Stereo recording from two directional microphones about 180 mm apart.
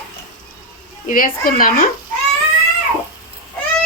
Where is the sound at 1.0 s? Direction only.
50° left (ahead or behind).